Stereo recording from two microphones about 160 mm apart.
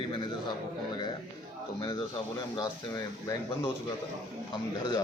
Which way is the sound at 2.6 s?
25° left (ahead or behind).